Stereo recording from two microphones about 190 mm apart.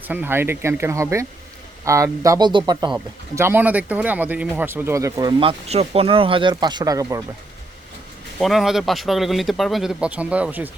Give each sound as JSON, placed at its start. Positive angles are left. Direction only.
{"t": 0.1, "sound": "speech", "side_deg": -10}
{"t": 3.3, "sound": "speech", "side_deg": -10}
{"t": 5.4, "sound": "speech", "side_deg": -30}
{"t": 8.4, "sound": "speech", "side_deg": 0}